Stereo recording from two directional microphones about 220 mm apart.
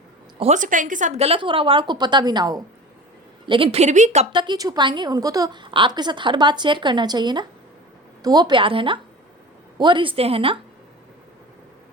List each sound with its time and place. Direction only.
0.3 s a woman's voice: 30° right (ahead or behind)